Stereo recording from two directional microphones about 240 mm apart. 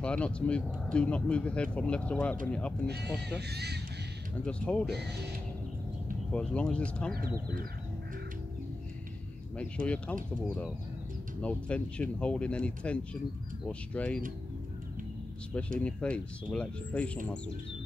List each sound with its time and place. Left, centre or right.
0.0 s speech: centre
3.3 s speech: right
4.5 s speech: centre
6.3 s speech: centre
11.4 s speech: centre
15.8 s speech: centre